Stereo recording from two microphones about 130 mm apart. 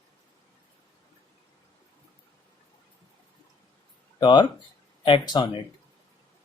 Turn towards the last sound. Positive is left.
turn(degrees=35)  # may be behind; listen again after turning